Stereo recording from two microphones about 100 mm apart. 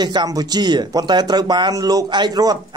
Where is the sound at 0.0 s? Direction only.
45° right (ahead or behind).